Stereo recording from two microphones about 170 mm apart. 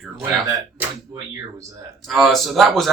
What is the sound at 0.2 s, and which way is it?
Speech, 15° right (ahead or behind).